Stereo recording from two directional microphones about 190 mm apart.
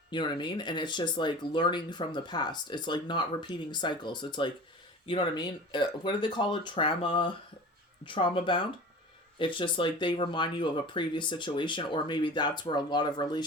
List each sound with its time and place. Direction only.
0.1 s speech: 25° left (ahead or behind)